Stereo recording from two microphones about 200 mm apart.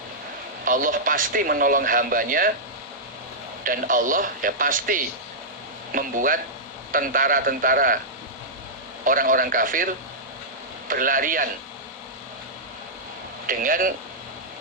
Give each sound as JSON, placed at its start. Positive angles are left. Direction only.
{"t": 0.6, "sound": "speech", "side_deg": -45}
{"t": 3.6, "sound": "speech", "side_deg": -45}
{"t": 9.0, "sound": "speech", "side_deg": -45}
{"t": 13.5, "sound": "speech", "side_deg": -45}